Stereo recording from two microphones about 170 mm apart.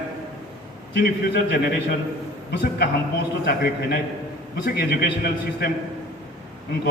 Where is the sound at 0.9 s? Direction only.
75° left (ahead or behind).